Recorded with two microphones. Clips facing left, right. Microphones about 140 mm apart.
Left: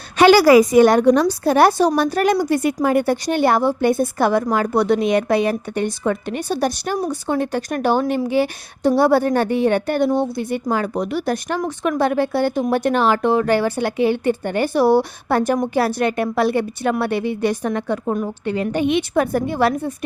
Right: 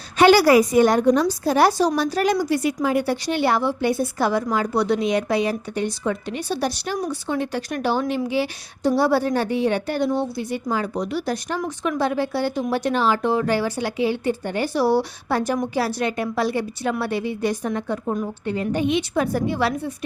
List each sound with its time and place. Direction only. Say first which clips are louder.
0.2 s a woman's voice: left 3 dB; 90° left; by 20.1 s 50° left (ahead or behind)